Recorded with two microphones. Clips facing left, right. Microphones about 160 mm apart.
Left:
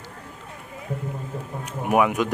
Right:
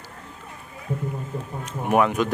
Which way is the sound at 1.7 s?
10° left (ahead or behind).